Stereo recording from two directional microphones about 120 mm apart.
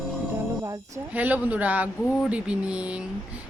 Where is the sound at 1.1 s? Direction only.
15° right (ahead or behind).